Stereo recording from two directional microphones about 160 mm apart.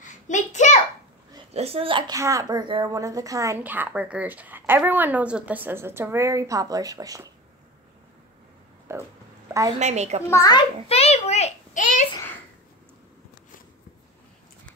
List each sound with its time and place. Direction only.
0.0 s a sound: 50° left (ahead or behind)
1.5 s a child's voice: 40° right (ahead or behind)
2.1 s a woman's voice: 20° right (ahead or behind)
8.9 s pig: 15° right (ahead or behind)
9.5 s a woman's voice: 20° right (ahead or behind)
9.8 s a woman's voice: 45° right (ahead or behind)
10.2 s a child's voice: 20° left (ahead or behind)
10.9 s a child's voice: 40° left (ahead or behind)